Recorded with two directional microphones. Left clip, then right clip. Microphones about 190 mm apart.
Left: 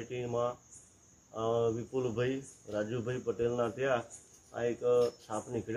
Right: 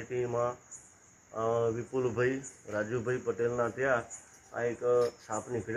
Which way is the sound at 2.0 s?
20° left (ahead or behind).